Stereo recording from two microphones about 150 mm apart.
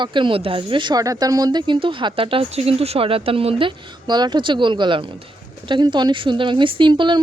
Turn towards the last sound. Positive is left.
turn(degrees=-30)  # may be behind; listen again after turning